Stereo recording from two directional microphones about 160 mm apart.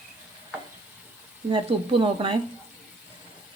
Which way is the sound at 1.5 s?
35° right (ahead or behind).